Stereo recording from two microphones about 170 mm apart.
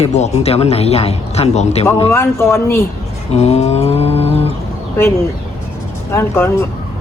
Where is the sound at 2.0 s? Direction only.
15° left (ahead or behind).